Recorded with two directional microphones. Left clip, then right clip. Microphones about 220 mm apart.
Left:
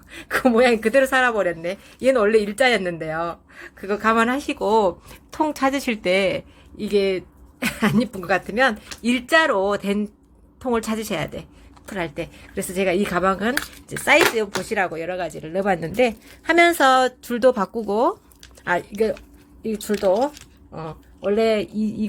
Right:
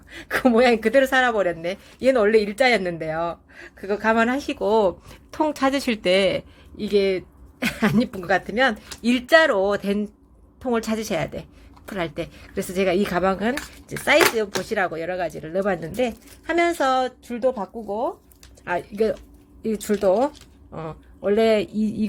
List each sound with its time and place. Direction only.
0.1 s speech: centre (ahead or behind)
15.8 s a woman's voice: 15° left (ahead or behind); by 18.1 s 35° left (ahead or behind)
18.9 s speech: centre (ahead or behind)
19.6 s speech: 10° right (ahead or behind)